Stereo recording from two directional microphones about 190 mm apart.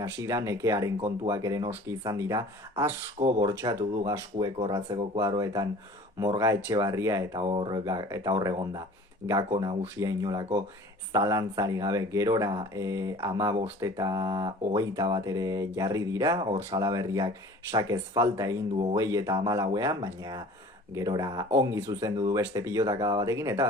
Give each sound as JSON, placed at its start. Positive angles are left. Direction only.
{"t": 0.0, "sound": "speech", "side_deg": -15}